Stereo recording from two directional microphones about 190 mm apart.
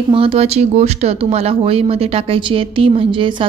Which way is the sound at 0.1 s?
30° right (ahead or behind).